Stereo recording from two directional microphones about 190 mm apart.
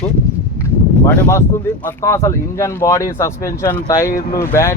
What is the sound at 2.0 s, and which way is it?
Speech, 15° left (ahead or behind).